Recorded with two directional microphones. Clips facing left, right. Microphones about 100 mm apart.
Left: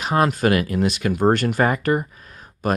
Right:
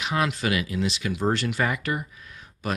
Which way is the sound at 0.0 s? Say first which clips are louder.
Left 7 dB; 45° left (ahead or behind).